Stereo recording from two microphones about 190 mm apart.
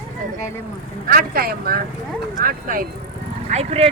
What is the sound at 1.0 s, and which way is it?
Speech, 50° right (ahead or behind).